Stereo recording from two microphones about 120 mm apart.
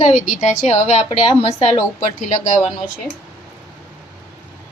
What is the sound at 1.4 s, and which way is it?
Speech, 55° left (ahead or behind).